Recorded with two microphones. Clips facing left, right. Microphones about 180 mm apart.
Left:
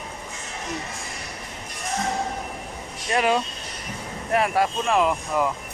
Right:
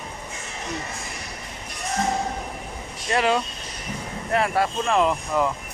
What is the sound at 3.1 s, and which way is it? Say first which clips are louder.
Speech: even; 15° left (ahead or behind).